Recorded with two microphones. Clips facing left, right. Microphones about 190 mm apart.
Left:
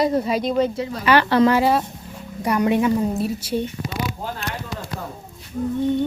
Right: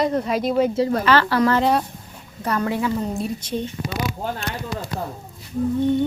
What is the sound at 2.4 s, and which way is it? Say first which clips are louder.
Speech: left 4 dB; 15° left (ahead or behind).